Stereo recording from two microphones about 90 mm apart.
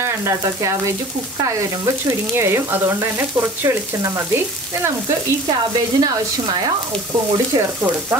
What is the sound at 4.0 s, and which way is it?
Frying, 40° right (ahead or behind).